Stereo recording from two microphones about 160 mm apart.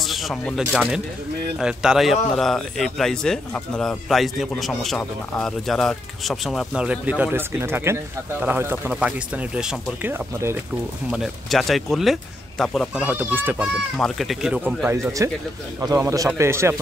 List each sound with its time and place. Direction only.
0.0 s a man's voice: centre (ahead or behind)
11.1 s a man's voice: centre (ahead or behind)
12.9 s a child's voice: 10° right (ahead or behind)
13.9 s a man's voice: centre (ahead or behind)
14.9 s a child's voice: 20° right (ahead or behind)